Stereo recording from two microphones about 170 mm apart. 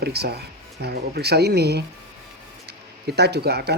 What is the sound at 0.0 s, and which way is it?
Speech, 70° right (ahead or behind).